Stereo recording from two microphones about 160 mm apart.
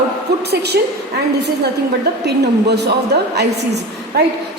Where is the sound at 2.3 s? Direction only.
90° right.